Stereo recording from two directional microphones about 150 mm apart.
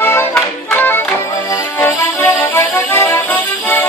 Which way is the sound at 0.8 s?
15° left (ahead or behind).